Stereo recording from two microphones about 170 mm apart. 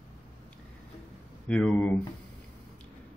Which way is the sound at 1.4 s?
5° left (ahead or behind).